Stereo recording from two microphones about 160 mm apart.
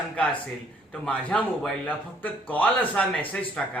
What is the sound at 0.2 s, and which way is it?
Speech, 5° left (ahead or behind).